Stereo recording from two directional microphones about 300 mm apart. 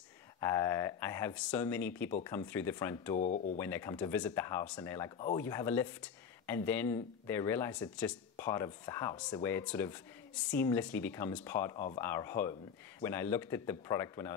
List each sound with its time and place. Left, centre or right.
0.4 s speech: centre
3.2 s speech: left
3.5 s speech: centre